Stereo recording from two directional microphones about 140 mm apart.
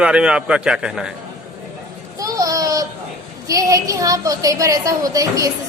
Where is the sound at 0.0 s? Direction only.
5° right (ahead or behind).